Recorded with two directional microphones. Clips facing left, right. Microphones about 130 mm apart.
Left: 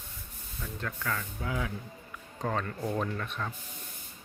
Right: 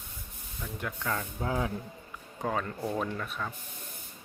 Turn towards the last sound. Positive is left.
turn(degrees=-5)  # may be behind; listen again after turning